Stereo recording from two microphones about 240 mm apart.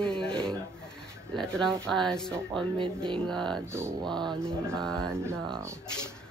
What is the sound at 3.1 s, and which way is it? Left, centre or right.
Speech, centre.